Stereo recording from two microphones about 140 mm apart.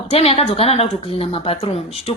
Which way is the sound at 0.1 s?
45° left (ahead or behind).